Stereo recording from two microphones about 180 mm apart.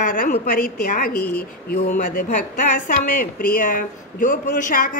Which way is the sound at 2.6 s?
50° left (ahead or behind).